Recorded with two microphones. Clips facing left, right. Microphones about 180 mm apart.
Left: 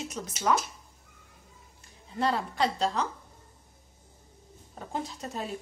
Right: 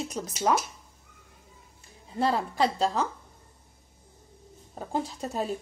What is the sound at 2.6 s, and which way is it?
Speech, 40° right (ahead or behind).